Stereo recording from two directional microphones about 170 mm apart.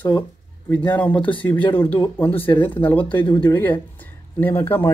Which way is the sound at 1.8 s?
25° left (ahead or behind).